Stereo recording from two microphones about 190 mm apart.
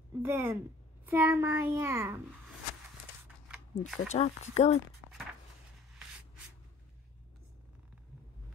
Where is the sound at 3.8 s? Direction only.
35° left (ahead or behind).